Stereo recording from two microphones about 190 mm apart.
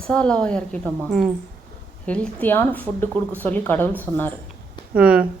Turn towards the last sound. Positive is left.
turn(degrees=-5)  # may be behind; listen again after turning